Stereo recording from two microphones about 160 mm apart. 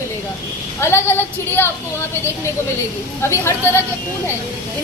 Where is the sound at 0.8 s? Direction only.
15° left (ahead or behind).